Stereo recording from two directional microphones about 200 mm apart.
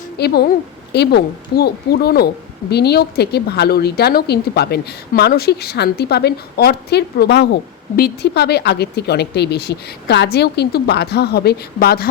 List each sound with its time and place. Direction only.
0.2 s a woman's voice: 50° left (ahead or behind)